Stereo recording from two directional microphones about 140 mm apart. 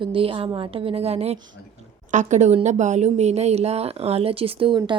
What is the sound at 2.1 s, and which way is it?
A woman's voice, 60° right (ahead or behind).